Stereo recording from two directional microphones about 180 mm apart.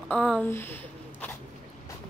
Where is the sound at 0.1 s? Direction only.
5° left (ahead or behind).